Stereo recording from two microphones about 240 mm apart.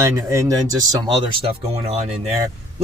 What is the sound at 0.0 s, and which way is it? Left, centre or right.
Speech, centre.